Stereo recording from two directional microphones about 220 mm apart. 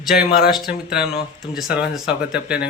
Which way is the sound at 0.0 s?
Centre (ahead or behind).